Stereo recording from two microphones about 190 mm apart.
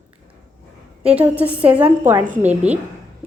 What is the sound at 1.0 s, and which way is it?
A woman's voice, 10° right (ahead or behind).